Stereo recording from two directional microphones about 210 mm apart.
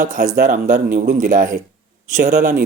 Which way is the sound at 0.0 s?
35° right (ahead or behind).